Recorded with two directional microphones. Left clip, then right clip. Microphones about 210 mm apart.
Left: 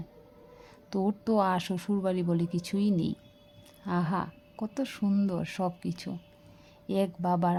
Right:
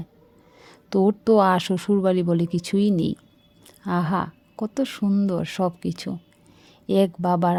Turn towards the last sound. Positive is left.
turn(degrees=-30)  # may be behind; listen again after turning